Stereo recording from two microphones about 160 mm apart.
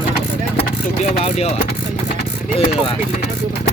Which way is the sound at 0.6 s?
40° left (ahead or behind).